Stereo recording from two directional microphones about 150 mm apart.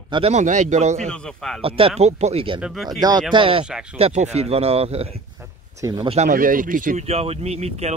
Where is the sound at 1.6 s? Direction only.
40° right (ahead or behind).